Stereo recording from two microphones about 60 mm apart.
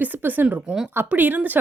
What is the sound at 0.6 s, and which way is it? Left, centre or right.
Speech, centre.